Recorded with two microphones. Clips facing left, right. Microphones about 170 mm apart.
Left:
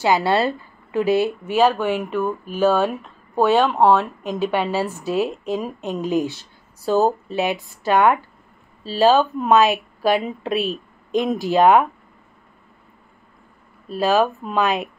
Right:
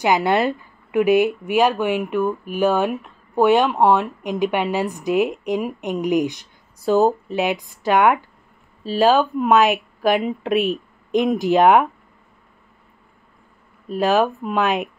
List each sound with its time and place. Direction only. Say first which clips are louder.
0.0 s speech: even; 15° right (ahead or behind)
13.8 s speech: even; 15° right (ahead or behind)